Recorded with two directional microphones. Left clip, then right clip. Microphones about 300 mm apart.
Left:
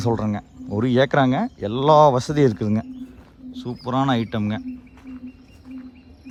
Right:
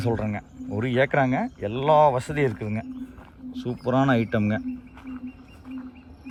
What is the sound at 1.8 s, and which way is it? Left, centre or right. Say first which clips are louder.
Speech: left 4 dB; centre.